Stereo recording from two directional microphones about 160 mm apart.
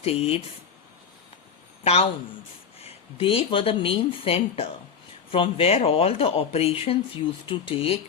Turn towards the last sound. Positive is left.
turn(degrees=35)  # may be behind; listen again after turning